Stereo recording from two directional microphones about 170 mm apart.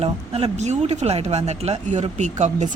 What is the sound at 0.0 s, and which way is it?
A woman's voice, 35° right (ahead or behind).